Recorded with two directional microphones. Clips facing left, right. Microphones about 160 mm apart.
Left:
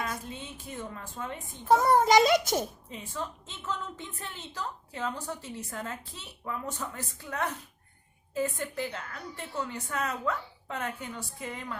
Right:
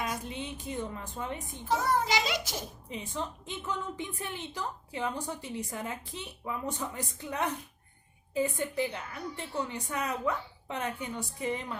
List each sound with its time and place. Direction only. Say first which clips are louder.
0.0 s a woman's voice: right 1 dB; 15° right (ahead or behind)
1.6 s a child's voice: left 7 dB; 50° left (ahead or behind)
2.9 s a woman's voice: right 1 dB; 15° right (ahead or behind)